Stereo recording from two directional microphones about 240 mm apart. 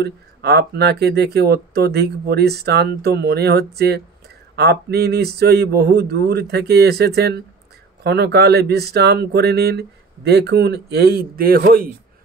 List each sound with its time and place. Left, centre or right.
0.0 s speech: right